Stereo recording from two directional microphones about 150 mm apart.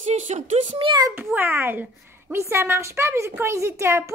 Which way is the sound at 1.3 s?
15° right (ahead or behind).